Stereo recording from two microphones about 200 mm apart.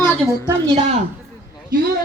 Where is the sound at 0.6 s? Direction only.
30° right (ahead or behind).